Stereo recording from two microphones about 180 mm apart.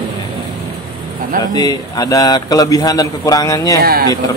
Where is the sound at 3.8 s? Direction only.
55° right (ahead or behind).